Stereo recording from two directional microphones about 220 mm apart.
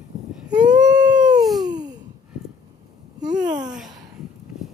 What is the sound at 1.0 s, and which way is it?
Dog, 5° right (ahead or behind).